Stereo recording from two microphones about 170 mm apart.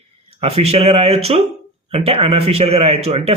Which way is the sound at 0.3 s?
35° right (ahead or behind).